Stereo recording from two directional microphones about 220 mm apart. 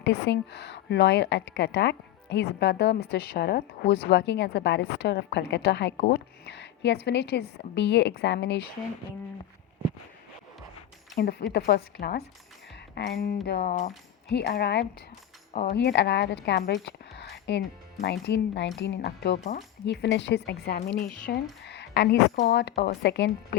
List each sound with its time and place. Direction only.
0.0 s a woman's voice: 50° left (ahead or behind)
11.2 s a woman's voice: 45° left (ahead or behind)
13.7 s speech: 35° left (ahead or behind)
14.3 s a woman's voice: 50° left (ahead or behind)
21.6 s a sound: 50° left (ahead or behind)
22.4 s a woman's voice: 45° left (ahead or behind)